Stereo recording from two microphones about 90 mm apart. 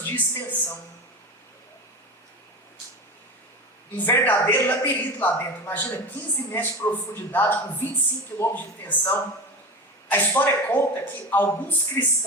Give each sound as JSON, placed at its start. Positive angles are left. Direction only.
{"t": 0.0, "sound": "speech", "side_deg": 20}
{"t": 3.9, "sound": "speech", "side_deg": 20}